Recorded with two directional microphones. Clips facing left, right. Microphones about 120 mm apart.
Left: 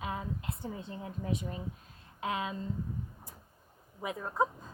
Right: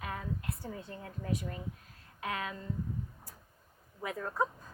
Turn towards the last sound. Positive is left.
turn(degrees=20)  # may be behind; listen again after turning